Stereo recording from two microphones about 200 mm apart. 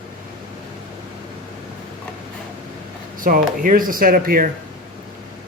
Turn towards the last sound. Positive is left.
turn(degrees=-45)  # may be behind; listen again after turning